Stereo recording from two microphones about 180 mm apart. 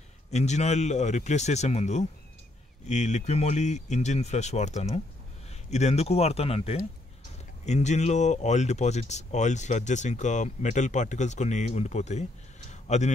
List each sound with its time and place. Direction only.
0.3 s speech: 40° left (ahead or behind)